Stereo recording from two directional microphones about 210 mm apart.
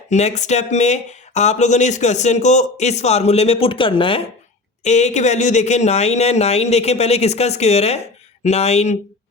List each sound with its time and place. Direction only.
0.1 s speech: 35° left (ahead or behind)